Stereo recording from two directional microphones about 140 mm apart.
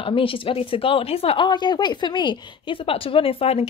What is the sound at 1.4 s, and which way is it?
A woman's voice, 30° left (ahead or behind).